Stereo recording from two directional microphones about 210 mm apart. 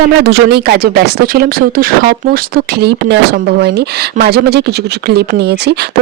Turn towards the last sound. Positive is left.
turn(degrees=-50)  # may be behind; listen again after turning